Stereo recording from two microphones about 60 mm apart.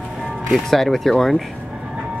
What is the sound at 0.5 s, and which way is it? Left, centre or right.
Speech, centre.